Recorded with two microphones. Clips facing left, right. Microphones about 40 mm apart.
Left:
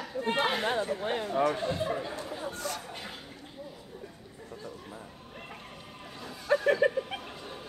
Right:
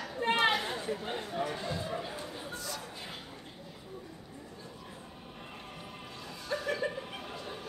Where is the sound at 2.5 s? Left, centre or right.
Left.